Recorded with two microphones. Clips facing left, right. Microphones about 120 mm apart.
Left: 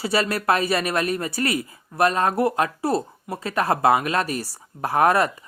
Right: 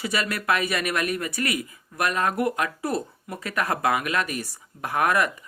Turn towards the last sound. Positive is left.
turn(degrees=30)  # may be behind; listen again after turning